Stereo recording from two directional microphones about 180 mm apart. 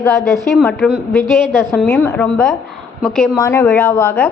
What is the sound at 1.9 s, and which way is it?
Speech, 15° left (ahead or behind).